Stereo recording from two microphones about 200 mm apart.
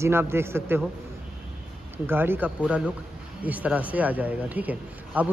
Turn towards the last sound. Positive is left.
turn(degrees=-10)  # may be behind; listen again after turning